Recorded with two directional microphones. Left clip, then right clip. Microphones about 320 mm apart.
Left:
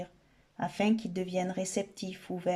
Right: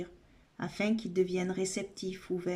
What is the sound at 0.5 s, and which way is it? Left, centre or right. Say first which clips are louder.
Speech: left 3 dB; centre.